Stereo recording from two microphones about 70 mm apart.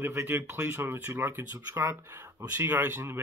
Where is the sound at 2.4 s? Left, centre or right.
Right.